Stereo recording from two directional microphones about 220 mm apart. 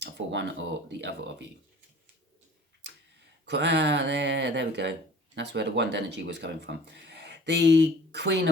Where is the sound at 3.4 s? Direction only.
50° right (ahead or behind).